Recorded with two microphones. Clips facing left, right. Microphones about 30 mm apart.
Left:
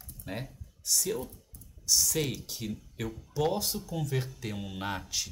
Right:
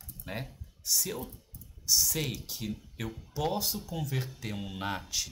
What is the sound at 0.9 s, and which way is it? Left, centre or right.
Speech, centre.